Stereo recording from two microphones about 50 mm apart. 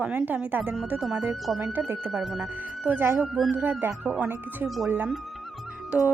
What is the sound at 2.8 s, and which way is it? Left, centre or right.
Speech, right.